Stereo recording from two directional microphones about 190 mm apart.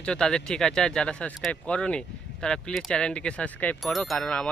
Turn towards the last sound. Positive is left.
turn(degrees=5)  # may be behind; listen again after turning